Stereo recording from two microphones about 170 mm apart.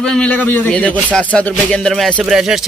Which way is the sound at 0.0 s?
5° left (ahead or behind).